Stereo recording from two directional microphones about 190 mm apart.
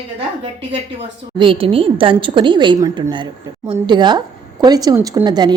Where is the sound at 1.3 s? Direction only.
25° right (ahead or behind).